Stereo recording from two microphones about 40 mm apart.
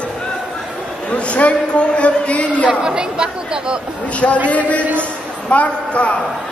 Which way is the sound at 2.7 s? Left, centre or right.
Right.